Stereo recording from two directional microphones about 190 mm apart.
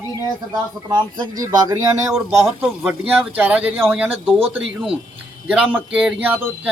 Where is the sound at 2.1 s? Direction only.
Centre (ahead or behind).